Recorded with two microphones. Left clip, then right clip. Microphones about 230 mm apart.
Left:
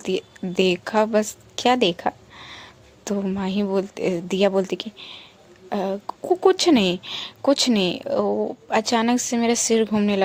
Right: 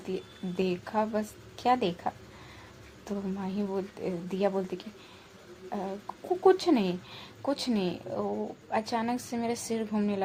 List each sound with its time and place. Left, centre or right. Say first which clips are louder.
0.0 s a woman's voice: left 11 dB; left